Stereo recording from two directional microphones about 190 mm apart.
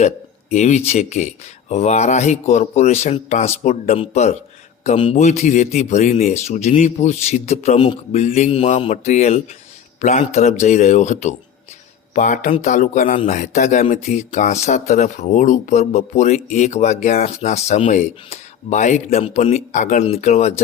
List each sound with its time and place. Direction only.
0.5 s a man's voice: 35° left (ahead or behind)